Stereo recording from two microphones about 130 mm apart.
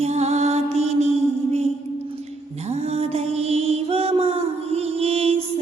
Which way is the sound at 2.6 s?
55° right (ahead or behind).